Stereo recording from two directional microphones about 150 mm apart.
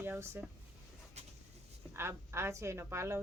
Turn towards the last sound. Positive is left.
turn(degrees=-15)  # may be behind; listen again after turning